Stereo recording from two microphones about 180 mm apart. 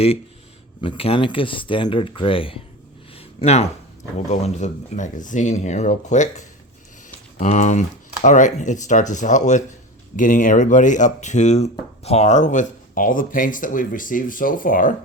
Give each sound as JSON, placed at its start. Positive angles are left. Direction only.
{"t": 0.8, "sound": "speech", "side_deg": 30}
{"t": 3.2, "sound": "a sound", "side_deg": 35}
{"t": 4.3, "sound": "speech", "side_deg": 40}